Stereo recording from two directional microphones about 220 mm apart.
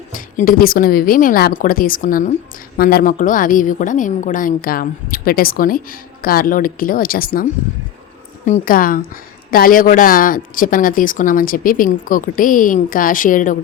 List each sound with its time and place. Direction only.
0.1 s a woman's voice: 40° left (ahead or behind)
8.4 s a woman's voice: 35° left (ahead or behind)